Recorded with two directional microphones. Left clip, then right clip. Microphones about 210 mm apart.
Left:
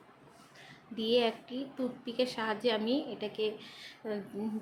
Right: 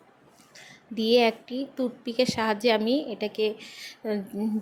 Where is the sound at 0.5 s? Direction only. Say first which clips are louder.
Right 8 dB; 35° right (ahead or behind).